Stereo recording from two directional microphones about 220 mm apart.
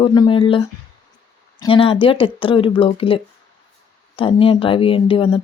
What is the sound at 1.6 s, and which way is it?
Speech, 25° left (ahead or behind).